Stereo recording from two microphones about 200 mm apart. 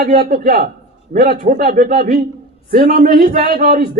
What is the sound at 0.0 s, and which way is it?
Speech, 50° right (ahead or behind).